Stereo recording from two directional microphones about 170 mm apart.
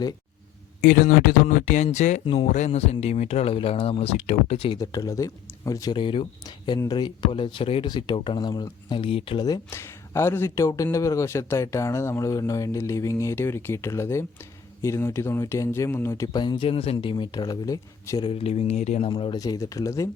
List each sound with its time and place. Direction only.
0.8 s speech: 50° left (ahead or behind)
2.2 s speech: 30° left (ahead or behind)
2.5 s speech: 45° left (ahead or behind); by 18.3 s 20° left (ahead or behind)
18.3 s speech: 35° left (ahead or behind); by 20.1 s 20° left (ahead or behind)